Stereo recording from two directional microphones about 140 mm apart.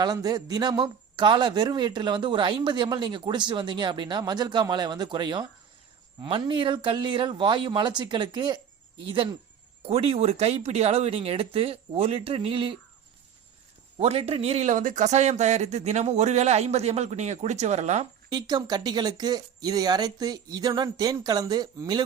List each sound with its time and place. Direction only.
0.0 s a man's voice: 30° right (ahead or behind)
14.0 s speech: 45° right (ahead or behind)
18.3 s speech: 30° right (ahead or behind)